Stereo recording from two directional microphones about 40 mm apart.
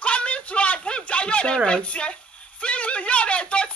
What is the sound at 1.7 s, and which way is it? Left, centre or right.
Speech, left.